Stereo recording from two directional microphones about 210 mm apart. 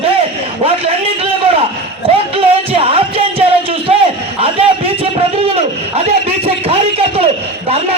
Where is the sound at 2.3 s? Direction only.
25° right (ahead or behind).